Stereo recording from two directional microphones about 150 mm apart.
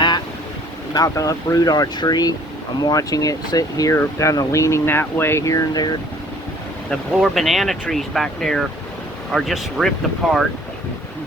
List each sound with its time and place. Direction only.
0.9 s speech: 20° left (ahead or behind)
6.9 s speech: centre (ahead or behind)